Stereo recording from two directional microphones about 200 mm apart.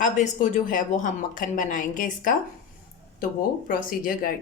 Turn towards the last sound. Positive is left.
turn(degrees=45)  # may be behind; listen again after turning